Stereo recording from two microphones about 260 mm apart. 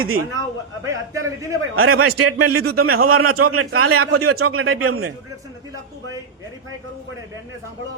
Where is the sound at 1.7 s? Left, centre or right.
Right.